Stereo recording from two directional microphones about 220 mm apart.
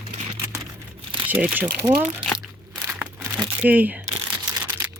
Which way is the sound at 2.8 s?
10° right (ahead or behind).